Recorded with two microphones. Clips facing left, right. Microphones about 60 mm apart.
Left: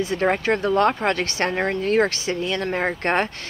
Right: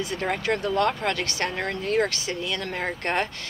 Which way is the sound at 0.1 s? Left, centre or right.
Left.